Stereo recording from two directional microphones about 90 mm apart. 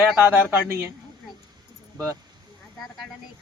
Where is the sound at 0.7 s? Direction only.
25° right (ahead or behind).